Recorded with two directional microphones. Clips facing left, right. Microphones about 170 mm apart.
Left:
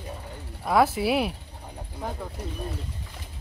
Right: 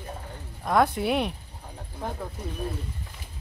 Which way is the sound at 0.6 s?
5° left (ahead or behind).